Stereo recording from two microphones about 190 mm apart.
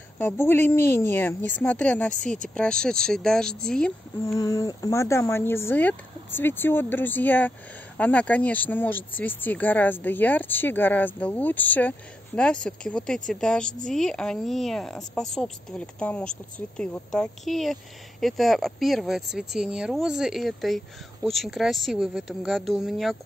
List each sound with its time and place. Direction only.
0.2 s speech: 10° left (ahead or behind)
2.1 s speech: 45° right (ahead or behind)
2.5 s speech: 5° left (ahead or behind)
4.2 s speech: 15° left (ahead or behind); by 23.1 s centre (ahead or behind)